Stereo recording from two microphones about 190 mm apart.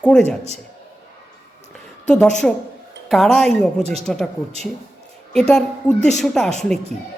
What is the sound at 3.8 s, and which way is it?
Speech, 35° right (ahead or behind).